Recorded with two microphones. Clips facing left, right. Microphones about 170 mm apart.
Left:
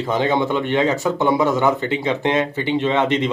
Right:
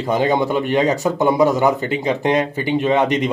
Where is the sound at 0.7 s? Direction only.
40° right (ahead or behind).